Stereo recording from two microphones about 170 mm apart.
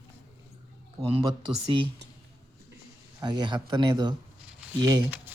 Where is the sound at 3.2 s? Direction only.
25° right (ahead or behind).